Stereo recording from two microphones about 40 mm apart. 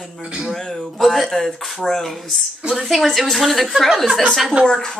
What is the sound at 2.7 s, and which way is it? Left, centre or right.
Speech, centre.